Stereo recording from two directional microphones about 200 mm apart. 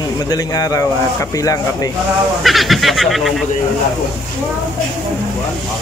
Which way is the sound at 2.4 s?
Centre (ahead or behind).